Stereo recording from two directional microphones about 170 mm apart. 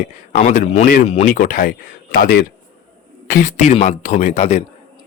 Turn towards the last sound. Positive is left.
turn(degrees=40)  # may be behind; listen again after turning